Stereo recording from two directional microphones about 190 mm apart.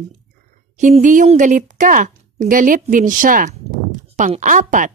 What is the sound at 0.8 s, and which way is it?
A woman's voice, 40° right (ahead or behind).